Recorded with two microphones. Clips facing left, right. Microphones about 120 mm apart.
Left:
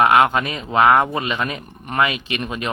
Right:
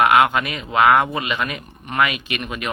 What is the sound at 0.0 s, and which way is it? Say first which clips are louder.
Speech: left 1 dB; 30° left (ahead or behind).